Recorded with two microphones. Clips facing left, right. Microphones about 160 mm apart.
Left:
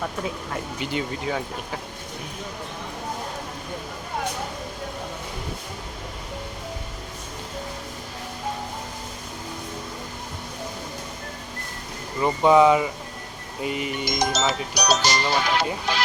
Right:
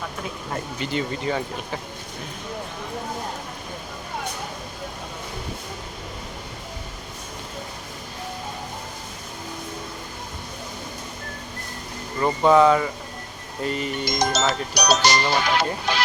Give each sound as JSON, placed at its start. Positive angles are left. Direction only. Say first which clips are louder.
{"t": 0.8, "sound": "speech", "louder": "right 2 dB", "side_deg": 10}
{"t": 12.2, "sound": "speech", "louder": "even", "side_deg": 10}
{"t": 14.7, "sound": "speech", "louder": "right 2 dB", "side_deg": -70}